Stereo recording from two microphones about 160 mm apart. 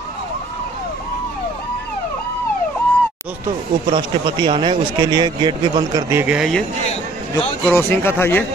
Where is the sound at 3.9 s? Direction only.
30° right (ahead or behind).